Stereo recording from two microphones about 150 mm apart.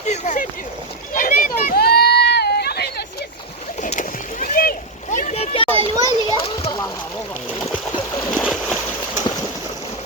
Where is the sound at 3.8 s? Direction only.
60° left (ahead or behind); by 5.7 s 40° left (ahead or behind).